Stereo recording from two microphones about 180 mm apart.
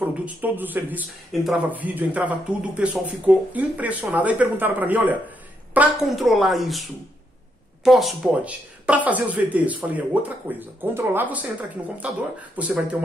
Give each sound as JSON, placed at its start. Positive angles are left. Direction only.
{"t": 0.0, "sound": "a man's voice", "side_deg": -10}